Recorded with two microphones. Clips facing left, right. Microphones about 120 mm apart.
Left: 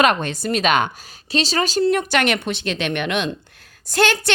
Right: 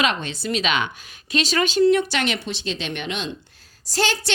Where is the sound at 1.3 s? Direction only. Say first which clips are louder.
Left 1 dB; 30° left (ahead or behind).